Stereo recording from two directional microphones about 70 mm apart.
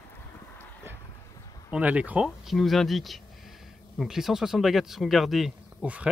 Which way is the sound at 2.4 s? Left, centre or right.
Centre.